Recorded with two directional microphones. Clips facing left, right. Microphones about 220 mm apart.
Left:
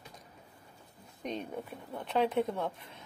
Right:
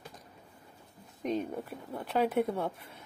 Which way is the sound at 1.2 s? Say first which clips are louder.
Right 5 dB; centre (ahead or behind).